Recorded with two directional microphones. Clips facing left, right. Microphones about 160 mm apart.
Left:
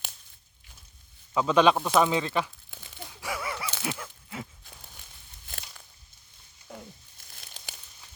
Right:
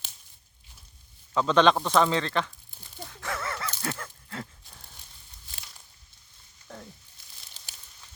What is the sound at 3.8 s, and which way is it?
Dog, 10° left (ahead or behind).